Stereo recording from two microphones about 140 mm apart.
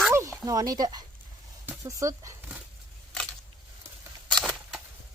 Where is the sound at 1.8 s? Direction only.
20° right (ahead or behind).